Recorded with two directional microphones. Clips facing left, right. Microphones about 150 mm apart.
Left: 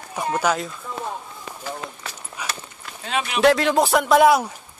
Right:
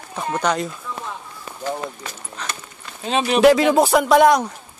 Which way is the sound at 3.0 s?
30° right (ahead or behind).